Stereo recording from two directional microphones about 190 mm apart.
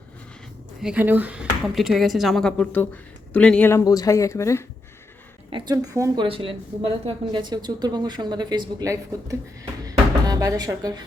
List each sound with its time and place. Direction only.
0.8 s speech: 5° right (ahead or behind); by 4.6 s 15° left (ahead or behind)
5.5 s a woman's voice: 25° right (ahead or behind)
6.2 s a woman's voice: 30° right (ahead or behind)
9.8 s music: 20° right (ahead or behind)